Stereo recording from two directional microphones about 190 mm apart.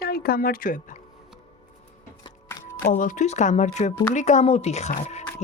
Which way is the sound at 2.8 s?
45° left (ahead or behind).